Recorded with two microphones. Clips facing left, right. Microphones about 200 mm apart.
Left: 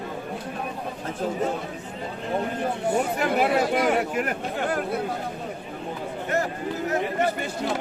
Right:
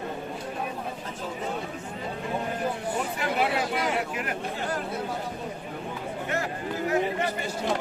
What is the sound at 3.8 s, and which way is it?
Speech, 55° left (ahead or behind).